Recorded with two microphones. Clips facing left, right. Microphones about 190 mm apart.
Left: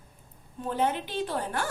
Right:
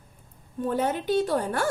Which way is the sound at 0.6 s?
45° right (ahead or behind).